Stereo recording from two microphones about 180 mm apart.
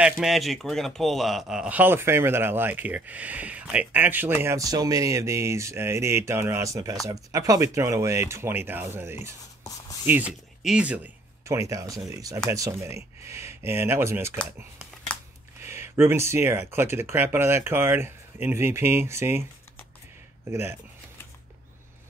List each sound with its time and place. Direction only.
0.0 s a man's voice: centre (ahead or behind)
11.4 s a man's voice: 15° right (ahead or behind)
15.6 s a man's voice: 15° right (ahead or behind)